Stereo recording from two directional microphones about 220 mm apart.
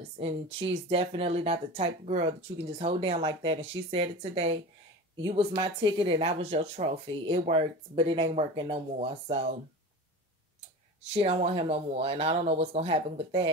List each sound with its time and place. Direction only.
0.2 s speech: 25° right (ahead or behind)
11.1 s speech: 25° right (ahead or behind)